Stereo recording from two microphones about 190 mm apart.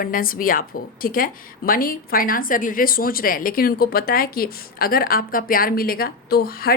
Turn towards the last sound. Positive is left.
turn(degrees=50)  # may be behind; listen again after turning